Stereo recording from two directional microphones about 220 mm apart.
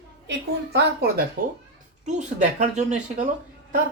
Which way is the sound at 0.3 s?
50° right (ahead or behind).